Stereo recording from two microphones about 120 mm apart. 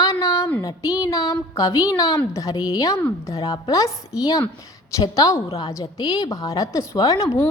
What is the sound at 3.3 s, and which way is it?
A woman's voice, 30° left (ahead or behind).